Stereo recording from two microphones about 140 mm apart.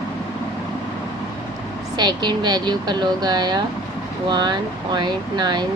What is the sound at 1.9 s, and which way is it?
Speech, 30° right (ahead or behind).